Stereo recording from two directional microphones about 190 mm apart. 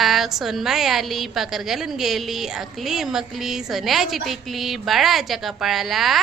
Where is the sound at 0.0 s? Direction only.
Centre (ahead or behind).